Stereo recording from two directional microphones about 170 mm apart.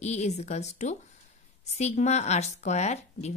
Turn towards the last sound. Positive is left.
turn(degrees=40)  # may be behind; listen again after turning